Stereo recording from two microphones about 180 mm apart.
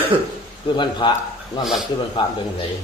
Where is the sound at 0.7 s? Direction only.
25° left (ahead or behind).